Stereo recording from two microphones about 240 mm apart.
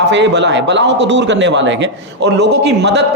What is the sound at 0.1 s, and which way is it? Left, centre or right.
A man's voice, right.